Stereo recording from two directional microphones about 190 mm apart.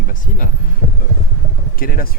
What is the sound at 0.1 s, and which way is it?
Speech, 45° left (ahead or behind).